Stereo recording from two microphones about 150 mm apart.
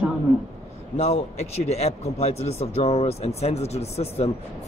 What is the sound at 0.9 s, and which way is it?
Speech, 45° left (ahead or behind).